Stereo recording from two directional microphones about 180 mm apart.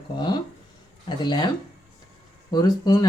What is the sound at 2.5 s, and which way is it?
Speech, 20° left (ahead or behind).